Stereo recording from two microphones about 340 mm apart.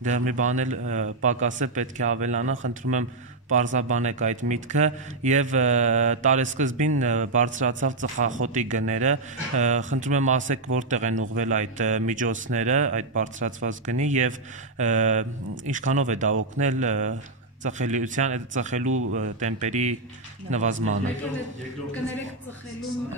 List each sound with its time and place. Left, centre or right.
0.0 s speech: right
18.9 s speech: right
19.1 s speech: right
20.7 s speech: right